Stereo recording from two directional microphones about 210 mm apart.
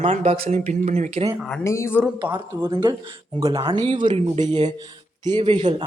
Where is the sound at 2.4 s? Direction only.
20° right (ahead or behind).